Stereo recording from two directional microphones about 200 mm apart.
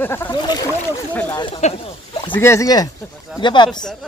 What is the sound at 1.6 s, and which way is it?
Speech, 35° left (ahead or behind).